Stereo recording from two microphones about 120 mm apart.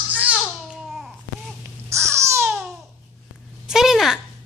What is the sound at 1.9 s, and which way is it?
Baby cry, 25° right (ahead or behind).